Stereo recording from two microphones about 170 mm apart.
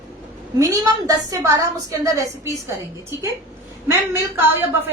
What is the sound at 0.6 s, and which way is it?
A woman's voice, 20° right (ahead or behind).